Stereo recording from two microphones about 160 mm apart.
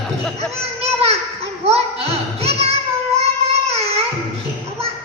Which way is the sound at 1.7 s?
40° right (ahead or behind).